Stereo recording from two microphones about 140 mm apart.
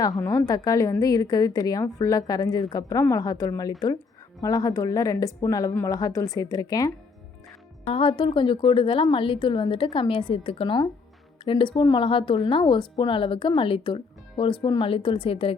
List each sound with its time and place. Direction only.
0.2 s a woman's voice: 25° left (ahead or behind)
7.9 s a woman's voice: 40° left (ahead or behind)